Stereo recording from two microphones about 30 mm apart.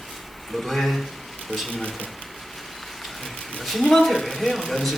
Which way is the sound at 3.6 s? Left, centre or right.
Centre.